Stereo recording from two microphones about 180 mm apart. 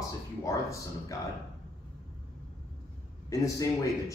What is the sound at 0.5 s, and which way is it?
Speech, 20° left (ahead or behind).